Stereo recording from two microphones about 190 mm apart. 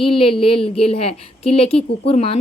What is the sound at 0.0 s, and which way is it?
Speech, 30° left (ahead or behind).